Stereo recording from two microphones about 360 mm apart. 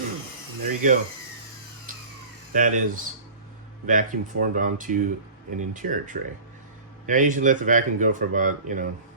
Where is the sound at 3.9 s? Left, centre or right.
Right.